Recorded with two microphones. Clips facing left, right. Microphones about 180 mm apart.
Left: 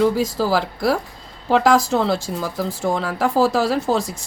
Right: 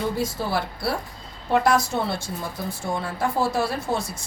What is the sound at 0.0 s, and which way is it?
Speech, 90° left.